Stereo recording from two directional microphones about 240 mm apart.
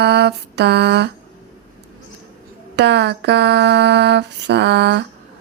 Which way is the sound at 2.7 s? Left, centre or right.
Right.